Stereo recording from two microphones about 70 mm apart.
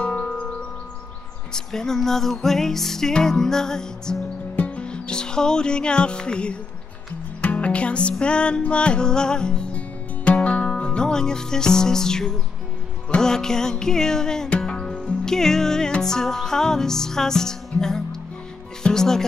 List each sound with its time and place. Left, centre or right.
0.0 s music: centre
1.5 s music: centre